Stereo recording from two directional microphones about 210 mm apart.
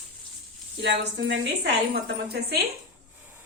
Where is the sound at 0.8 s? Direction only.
55° right (ahead or behind).